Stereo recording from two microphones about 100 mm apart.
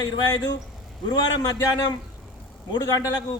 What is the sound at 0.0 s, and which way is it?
Speech, 40° left (ahead or behind).